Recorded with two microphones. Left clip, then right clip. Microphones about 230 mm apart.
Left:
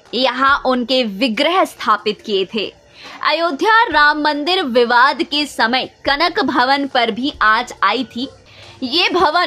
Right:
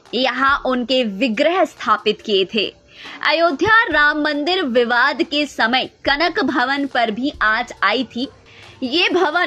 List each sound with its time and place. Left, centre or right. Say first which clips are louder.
0.1 s a woman's voice: left 2 dB; centre